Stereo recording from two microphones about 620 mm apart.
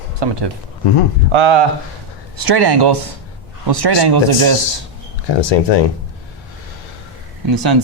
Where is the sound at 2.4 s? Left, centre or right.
Right.